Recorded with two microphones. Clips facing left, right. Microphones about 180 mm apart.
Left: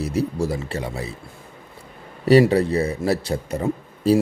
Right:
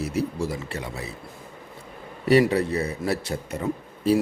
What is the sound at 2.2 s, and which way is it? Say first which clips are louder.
Speech: left 4 dB; 35° left (ahead or behind).